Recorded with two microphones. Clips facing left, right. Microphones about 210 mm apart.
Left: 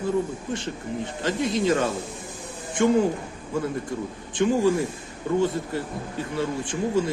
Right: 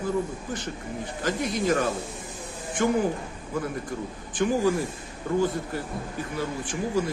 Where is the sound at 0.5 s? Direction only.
25° left (ahead or behind).